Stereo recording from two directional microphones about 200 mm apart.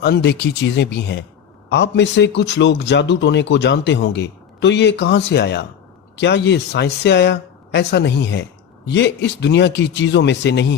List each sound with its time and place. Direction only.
0.0 s speech: 55° left (ahead or behind)